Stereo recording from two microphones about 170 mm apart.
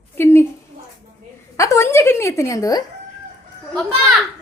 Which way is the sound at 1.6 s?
15° left (ahead or behind).